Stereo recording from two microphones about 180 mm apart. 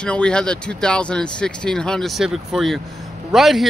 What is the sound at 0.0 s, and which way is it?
Speech, 5° left (ahead or behind).